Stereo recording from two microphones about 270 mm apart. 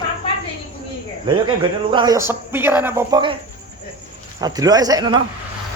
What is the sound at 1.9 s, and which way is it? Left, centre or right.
Speech, centre.